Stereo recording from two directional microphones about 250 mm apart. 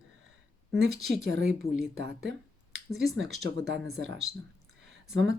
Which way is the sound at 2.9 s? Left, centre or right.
Centre.